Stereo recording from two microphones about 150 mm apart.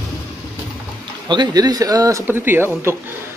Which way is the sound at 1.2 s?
30° right (ahead or behind).